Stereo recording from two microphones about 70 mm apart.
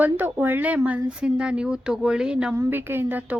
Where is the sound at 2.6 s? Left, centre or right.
Right.